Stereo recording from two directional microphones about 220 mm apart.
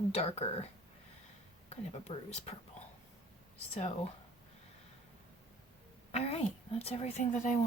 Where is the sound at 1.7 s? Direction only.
30° left (ahead or behind).